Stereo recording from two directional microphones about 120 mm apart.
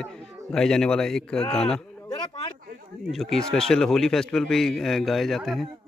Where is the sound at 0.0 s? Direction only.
5° left (ahead or behind).